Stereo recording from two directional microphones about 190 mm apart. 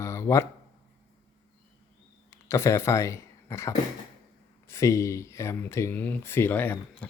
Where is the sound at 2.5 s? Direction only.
15° left (ahead or behind).